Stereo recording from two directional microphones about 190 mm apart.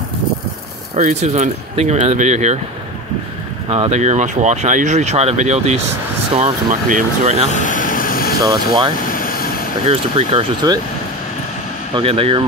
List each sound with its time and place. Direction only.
0.9 s speech: 40° right (ahead or behind)
3.7 s speech: 35° right (ahead or behind)
7.5 s vehicle: 45° left (ahead or behind)
8.4 s speech: 20° right (ahead or behind)
9.1 s vehicle: 50° left (ahead or behind)
9.8 s speech: 30° right (ahead or behind)
11.9 s speech: 30° right (ahead or behind)